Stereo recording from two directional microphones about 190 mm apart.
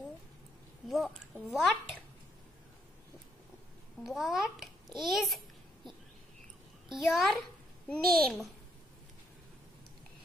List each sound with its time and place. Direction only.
0.8 s a child's voice: centre (ahead or behind)
4.0 s a child's voice: centre (ahead or behind)
6.9 s a child's voice: centre (ahead or behind)